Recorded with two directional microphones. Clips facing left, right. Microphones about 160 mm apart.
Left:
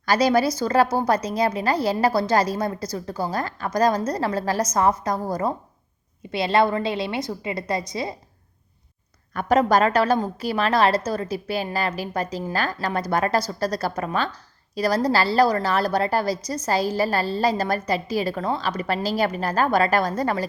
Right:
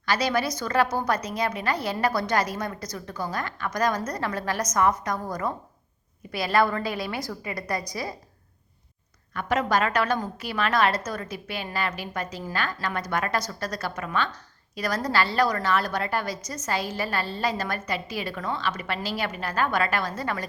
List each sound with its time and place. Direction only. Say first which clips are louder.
0.0 s a woman's voice: left 6 dB; 40° left (ahead or behind)
9.3 s a woman's voice: left 6 dB; 40° left (ahead or behind)